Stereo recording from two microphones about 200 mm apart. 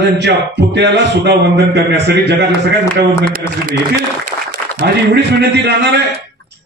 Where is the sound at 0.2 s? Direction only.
60° right (ahead or behind).